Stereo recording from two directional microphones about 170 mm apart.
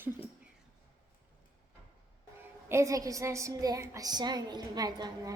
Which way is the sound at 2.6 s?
15° right (ahead or behind).